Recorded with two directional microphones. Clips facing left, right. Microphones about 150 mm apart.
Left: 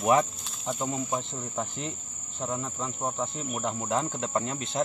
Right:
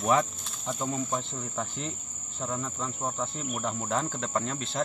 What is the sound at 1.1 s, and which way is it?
Speech, 15° left (ahead or behind).